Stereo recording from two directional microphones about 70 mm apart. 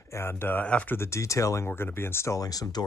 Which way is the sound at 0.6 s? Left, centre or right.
Centre.